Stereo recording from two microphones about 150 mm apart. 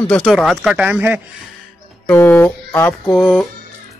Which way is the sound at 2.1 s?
15° left (ahead or behind).